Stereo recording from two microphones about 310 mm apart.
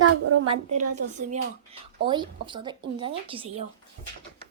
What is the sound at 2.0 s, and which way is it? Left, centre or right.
A woman's voice, centre.